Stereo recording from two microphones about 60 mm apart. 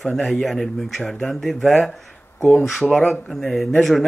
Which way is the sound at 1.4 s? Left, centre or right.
Centre.